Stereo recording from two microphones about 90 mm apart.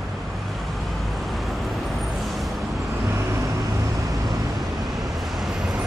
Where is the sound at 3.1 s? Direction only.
35° right (ahead or behind).